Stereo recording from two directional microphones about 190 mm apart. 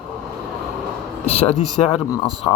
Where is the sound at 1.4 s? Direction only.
35° left (ahead or behind).